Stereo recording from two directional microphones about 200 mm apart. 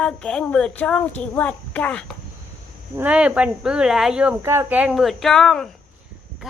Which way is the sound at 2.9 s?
5° right (ahead or behind).